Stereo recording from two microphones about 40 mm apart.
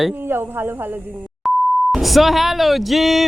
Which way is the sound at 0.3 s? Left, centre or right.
Right.